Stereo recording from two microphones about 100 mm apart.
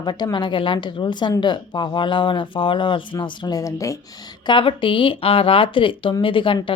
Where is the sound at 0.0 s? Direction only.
45° left (ahead or behind).